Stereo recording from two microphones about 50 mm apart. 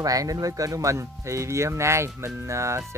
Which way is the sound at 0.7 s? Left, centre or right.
Right.